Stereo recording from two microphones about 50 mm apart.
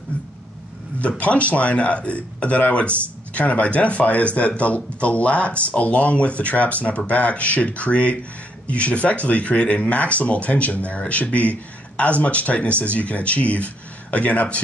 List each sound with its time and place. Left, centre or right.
1.2 s speech: left